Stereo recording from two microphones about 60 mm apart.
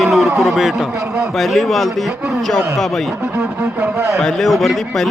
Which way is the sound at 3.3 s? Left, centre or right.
Right.